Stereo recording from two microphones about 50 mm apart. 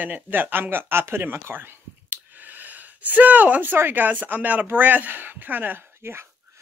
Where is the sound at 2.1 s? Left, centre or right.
Right.